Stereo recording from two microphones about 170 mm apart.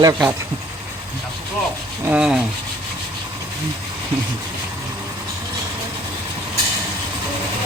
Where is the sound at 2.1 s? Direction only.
5° right (ahead or behind).